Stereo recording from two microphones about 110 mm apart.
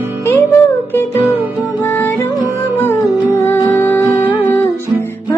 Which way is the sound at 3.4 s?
20° left (ahead or behind).